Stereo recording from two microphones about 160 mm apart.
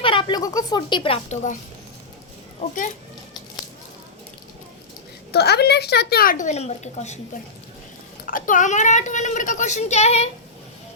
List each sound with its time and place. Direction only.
0.0 s a woman's voice: 30° left (ahead or behind)
2.6 s a child's voice: 55° left (ahead or behind)
5.3 s speech: 90° left; by 7.2 s 45° left (ahead or behind)
8.3 s speech: 55° left (ahead or behind)